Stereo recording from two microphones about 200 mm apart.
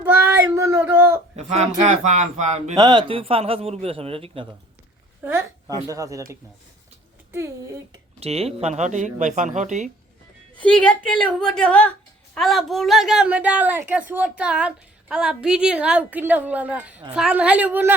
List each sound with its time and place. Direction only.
0.5 s a sound: 15° right (ahead or behind)
1.5 s speech: 35° right (ahead or behind)
2.7 s a man's voice: 20° right (ahead or behind)
5.2 s a woman's voice: 15° right (ahead or behind)
8.2 s speech: 30° right (ahead or behind)
10.6 s a woman's voice: 5° left (ahead or behind)